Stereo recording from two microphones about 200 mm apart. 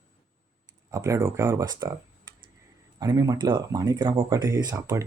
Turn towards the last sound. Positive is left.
turn(degrees=-15)  # may be behind; listen again after turning